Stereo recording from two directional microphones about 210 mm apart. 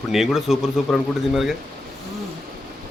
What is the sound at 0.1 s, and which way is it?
Speech, centre (ahead or behind).